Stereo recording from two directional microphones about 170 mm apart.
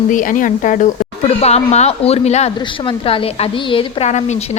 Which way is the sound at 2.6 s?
30° left (ahead or behind).